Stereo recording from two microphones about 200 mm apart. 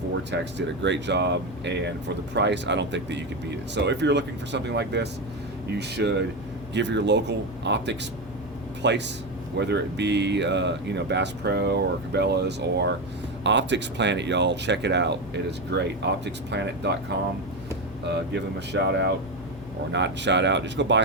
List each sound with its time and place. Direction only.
0.3 s speech: 60° right (ahead or behind)
18.7 s speech: 60° right (ahead or behind)